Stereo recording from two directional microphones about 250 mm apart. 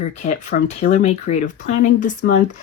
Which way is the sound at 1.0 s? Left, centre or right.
Left.